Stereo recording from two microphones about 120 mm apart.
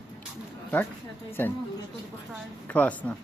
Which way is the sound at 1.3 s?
15° left (ahead or behind).